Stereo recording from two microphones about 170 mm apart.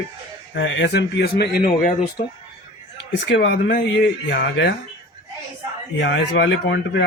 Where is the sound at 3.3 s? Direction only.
90° left.